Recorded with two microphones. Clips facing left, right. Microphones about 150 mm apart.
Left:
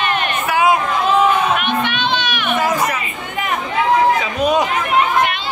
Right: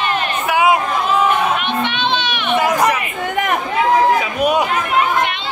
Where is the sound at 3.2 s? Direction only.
55° right (ahead or behind).